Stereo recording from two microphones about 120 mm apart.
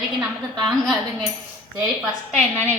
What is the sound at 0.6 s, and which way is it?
Speech, centre (ahead or behind).